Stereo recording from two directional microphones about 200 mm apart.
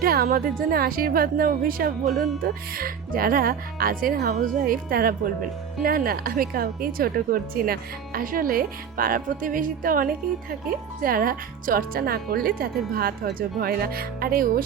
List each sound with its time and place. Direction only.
0.0 s a woman's voice: 45° right (ahead or behind)